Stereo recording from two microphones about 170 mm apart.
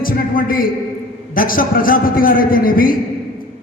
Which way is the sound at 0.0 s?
55° left (ahead or behind).